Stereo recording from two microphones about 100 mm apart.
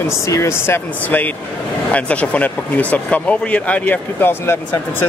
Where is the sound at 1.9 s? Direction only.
15° left (ahead or behind).